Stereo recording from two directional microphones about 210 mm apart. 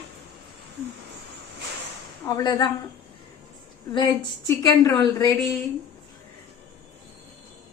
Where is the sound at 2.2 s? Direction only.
20° left (ahead or behind).